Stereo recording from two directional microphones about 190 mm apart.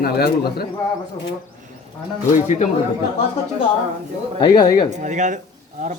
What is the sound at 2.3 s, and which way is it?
Speech, 40° left (ahead or behind).